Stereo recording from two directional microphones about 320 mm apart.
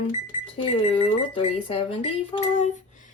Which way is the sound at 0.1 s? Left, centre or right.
Centre.